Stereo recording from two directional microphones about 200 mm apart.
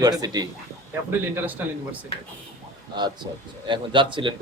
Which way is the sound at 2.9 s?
20° right (ahead or behind).